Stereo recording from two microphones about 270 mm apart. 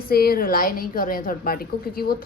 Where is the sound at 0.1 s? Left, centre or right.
Left.